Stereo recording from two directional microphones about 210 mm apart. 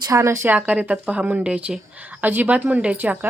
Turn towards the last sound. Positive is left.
turn(degrees=-10)  # may be behind; listen again after turning